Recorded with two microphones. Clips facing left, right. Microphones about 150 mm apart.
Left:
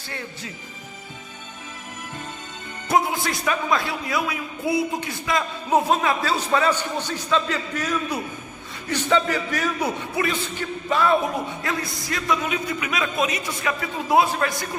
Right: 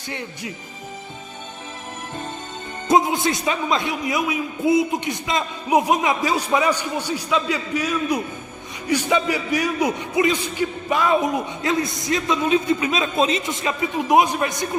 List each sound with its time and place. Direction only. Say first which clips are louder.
0.1 s a man's voice: right 4 dB; 20° right (ahead or behind)
2.8 s a man's voice: right 4 dB; 20° right (ahead or behind)